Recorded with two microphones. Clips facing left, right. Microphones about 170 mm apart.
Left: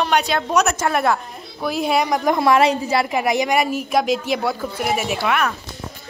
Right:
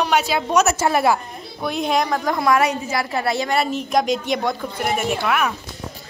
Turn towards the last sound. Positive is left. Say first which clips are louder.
# even
turn(degrees=0)  # may be behind; listen again after turning